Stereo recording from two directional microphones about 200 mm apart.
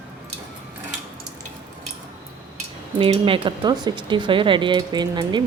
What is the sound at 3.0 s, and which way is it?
Speech, 25° right (ahead or behind).